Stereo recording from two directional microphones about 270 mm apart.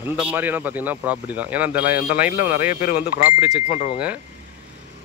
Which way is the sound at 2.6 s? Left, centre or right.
Left.